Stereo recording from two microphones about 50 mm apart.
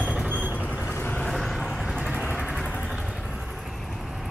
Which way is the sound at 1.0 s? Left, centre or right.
Left.